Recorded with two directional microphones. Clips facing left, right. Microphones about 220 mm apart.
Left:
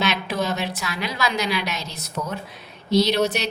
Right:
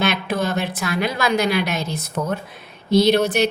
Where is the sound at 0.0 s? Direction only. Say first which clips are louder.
Right 3 dB; 55° right (ahead or behind).